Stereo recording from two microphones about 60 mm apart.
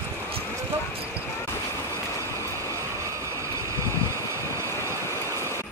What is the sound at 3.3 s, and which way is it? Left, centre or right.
Vehicle, right.